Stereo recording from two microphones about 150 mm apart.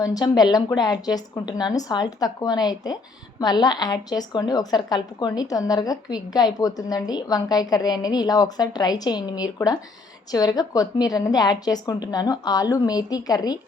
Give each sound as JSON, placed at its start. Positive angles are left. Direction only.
{"t": 0.0, "sound": "a woman's voice", "side_deg": 25}